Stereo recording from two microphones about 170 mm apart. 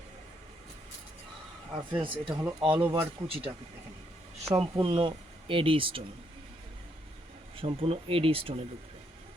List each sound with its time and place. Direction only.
1.9 s speech: 30° right (ahead or behind)
4.5 s speech: centre (ahead or behind)
4.8 s speech: 30° right (ahead or behind)
7.5 s speech: 30° right (ahead or behind)